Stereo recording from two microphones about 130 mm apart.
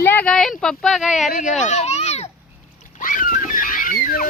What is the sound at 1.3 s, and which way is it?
Speech, 75° left (ahead or behind).